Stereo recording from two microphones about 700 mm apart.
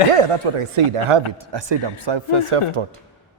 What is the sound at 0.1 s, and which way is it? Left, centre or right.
A man's voice, right.